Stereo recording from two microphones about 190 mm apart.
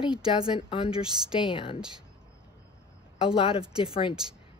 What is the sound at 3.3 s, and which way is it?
Speech, 30° left (ahead or behind).